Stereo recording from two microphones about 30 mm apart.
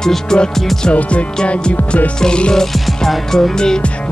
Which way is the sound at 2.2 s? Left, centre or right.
Left.